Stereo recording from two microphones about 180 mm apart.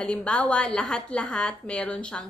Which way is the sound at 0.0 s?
5° left (ahead or behind).